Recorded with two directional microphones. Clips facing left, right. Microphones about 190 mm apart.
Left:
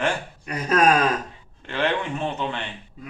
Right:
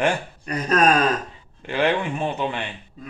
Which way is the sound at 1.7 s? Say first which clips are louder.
Right 3 dB; 10° right (ahead or behind).